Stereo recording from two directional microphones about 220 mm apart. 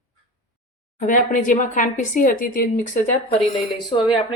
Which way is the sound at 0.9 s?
35° left (ahead or behind).